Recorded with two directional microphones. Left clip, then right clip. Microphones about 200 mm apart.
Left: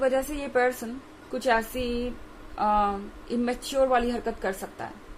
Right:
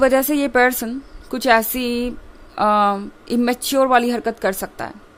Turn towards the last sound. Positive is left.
turn(degrees=-55)  # may be behind; listen again after turning